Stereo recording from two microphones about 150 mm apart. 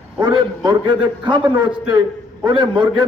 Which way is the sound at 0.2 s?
30° right (ahead or behind).